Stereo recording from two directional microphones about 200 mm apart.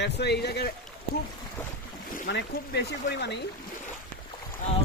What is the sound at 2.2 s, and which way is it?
Speech, 60° left (ahead or behind).